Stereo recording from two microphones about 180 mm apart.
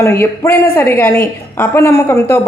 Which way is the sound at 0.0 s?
15° left (ahead or behind).